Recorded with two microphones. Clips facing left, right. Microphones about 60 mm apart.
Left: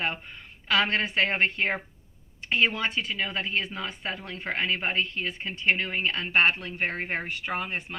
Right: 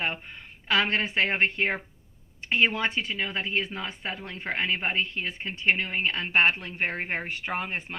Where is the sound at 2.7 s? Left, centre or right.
Right.